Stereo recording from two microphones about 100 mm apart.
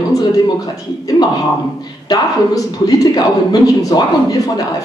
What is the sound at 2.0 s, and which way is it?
A woman's voice, 40° left (ahead or behind).